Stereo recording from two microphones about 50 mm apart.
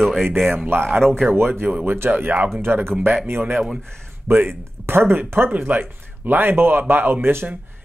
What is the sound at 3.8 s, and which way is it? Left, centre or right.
Speech, centre.